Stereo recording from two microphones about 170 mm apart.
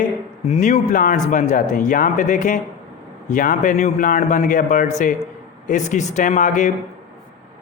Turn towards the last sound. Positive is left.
turn(degrees=50)  # may be behind; listen again after turning